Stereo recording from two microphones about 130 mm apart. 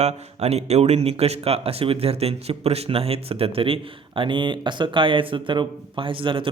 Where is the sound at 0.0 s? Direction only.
55° right (ahead or behind).